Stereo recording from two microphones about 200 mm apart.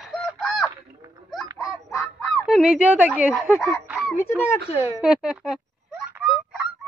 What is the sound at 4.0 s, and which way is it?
Speech, 10° left (ahead or behind).